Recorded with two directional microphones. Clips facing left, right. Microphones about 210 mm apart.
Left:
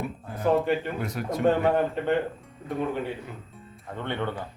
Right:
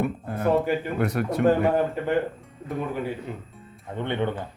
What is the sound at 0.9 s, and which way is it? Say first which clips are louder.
Speech: right 5 dB; 65° right (ahead or behind).